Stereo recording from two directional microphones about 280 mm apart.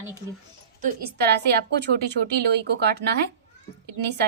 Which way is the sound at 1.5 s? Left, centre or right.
Right.